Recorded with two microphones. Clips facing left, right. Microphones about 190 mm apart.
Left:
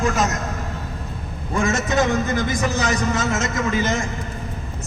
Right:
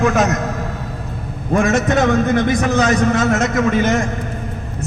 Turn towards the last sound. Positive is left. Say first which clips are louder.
# right 6 dB
turn(degrees=-60)  # may be behind; listen again after turning